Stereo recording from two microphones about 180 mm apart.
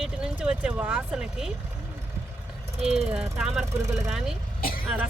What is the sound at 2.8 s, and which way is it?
Speech, 35° right (ahead or behind).